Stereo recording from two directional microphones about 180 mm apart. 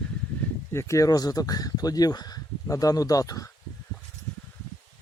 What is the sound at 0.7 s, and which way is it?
Speech, 15° left (ahead or behind).